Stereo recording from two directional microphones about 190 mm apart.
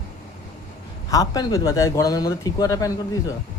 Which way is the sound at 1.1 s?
20° left (ahead or behind).